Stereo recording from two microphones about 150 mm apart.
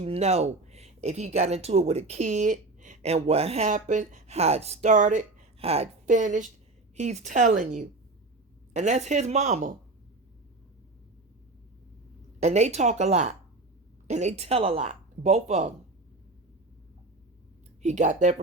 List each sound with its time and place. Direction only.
0.0 s speech: 45° right (ahead or behind)
5.5 s a woman's voice: 40° right (ahead or behind)
12.4 s speech: 50° right (ahead or behind)
17.8 s speech: 55° right (ahead or behind)